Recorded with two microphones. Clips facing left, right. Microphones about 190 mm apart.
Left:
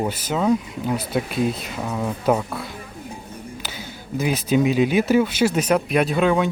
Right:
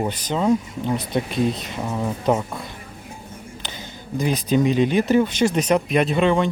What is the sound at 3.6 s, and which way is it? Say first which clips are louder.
Speech: left 1 dB; 5° left (ahead or behind).